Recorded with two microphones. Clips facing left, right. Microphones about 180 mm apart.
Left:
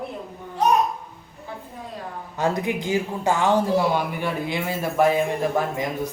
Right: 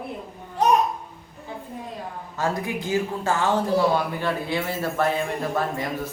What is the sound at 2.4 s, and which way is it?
A man's voice, 20° left (ahead or behind).